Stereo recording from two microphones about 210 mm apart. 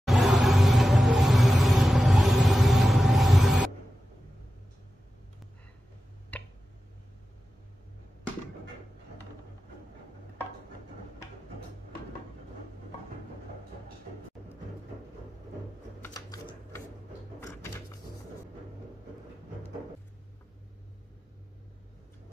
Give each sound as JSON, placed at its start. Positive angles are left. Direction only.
{"t": 0.0, "sound": "music", "side_deg": 0}
{"t": 6.3, "sound": "tick", "side_deg": 5}
{"t": 16.0, "sound": "typewriter", "side_deg": 15}